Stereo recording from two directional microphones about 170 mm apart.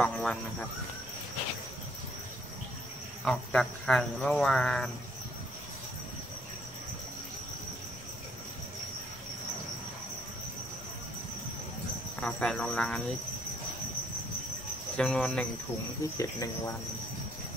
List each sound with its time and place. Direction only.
0.0 s speech: 5° left (ahead or behind)
3.3 s cricket: 5° left (ahead or behind)
12.2 s cricket: 5° left (ahead or behind)
15.0 s cricket: 5° left (ahead or behind)
16.2 s cricket: 20° left (ahead or behind)